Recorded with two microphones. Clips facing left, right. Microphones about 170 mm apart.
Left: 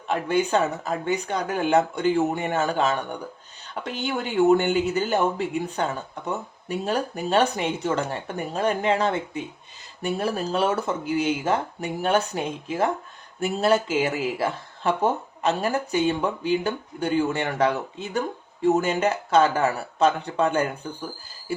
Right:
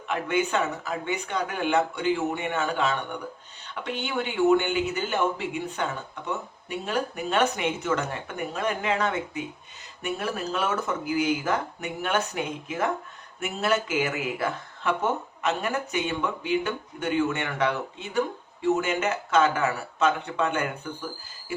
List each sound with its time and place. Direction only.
0.1 s speech: 35° left (ahead or behind)